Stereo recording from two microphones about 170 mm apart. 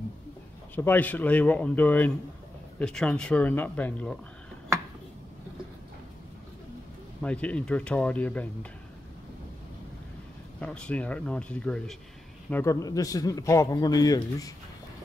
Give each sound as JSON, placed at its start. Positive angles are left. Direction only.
{"t": 0.7, "sound": "a man's voice", "side_deg": 10}
{"t": 7.2, "sound": "a man's voice", "side_deg": 10}
{"t": 10.6, "sound": "a man's voice", "side_deg": 5}